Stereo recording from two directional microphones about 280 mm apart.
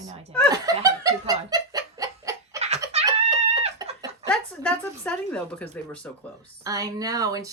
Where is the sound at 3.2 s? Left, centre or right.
Centre.